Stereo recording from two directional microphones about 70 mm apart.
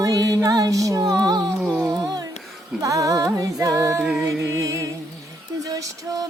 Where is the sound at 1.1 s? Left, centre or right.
Right.